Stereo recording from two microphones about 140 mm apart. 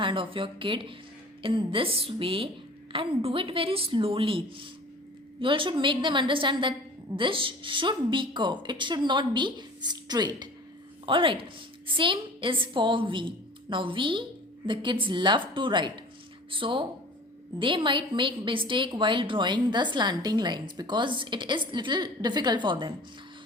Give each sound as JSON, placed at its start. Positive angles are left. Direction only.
{"t": 0.0, "sound": "a woman's voice", "side_deg": -35}